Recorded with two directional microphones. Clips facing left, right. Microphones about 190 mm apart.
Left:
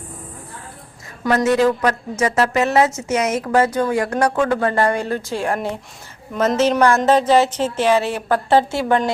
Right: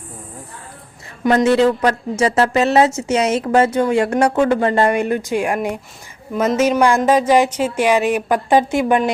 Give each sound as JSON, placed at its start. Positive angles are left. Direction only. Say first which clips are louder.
{"t": 1.2, "sound": "a woman's voice", "louder": "right 2 dB", "side_deg": -25}